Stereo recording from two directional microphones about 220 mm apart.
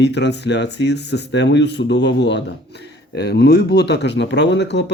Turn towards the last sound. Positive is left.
turn(degrees=50)  # may be behind; listen again after turning